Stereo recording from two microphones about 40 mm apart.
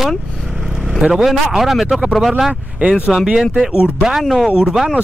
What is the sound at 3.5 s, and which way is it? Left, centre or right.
Speech, centre.